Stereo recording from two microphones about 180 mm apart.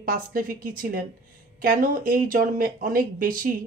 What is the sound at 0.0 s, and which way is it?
Speech, 55° right (ahead or behind).